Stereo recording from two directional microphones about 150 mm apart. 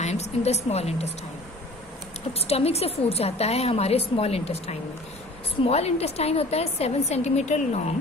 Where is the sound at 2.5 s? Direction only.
45° left (ahead or behind).